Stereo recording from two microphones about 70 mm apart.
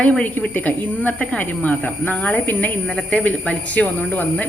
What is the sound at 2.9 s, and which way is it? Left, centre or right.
Speech, centre.